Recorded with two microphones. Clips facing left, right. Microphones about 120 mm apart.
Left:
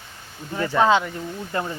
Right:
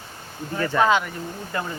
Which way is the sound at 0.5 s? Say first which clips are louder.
Left 1 dB; 15° left (ahead or behind).